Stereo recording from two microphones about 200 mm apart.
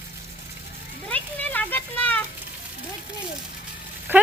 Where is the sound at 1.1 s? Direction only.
10° left (ahead or behind).